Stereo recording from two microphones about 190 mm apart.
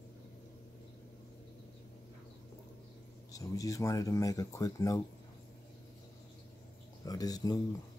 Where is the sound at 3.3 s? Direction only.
15° left (ahead or behind).